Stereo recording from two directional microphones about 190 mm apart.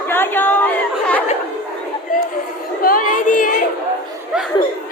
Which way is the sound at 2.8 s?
45° left (ahead or behind).